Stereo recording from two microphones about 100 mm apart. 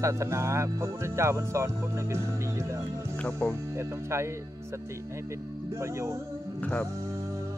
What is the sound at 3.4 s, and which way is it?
Music, 10° left (ahead or behind).